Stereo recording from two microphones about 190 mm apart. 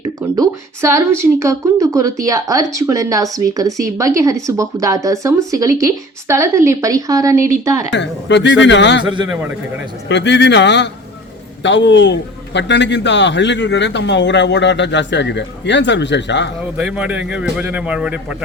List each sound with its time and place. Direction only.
0.2 s speech: 15° right (ahead or behind)
7.9 s a man's voice: 70° left (ahead or behind)
9.3 s speech: 10° right (ahead or behind)
10.1 s a man's voice: 65° left (ahead or behind)
16.7 s speech: 5° right (ahead or behind)